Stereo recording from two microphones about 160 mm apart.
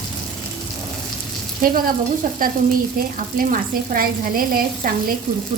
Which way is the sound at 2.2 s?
50° right (ahead or behind).